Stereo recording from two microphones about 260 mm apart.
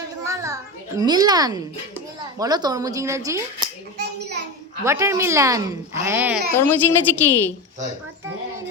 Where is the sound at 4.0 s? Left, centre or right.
Right.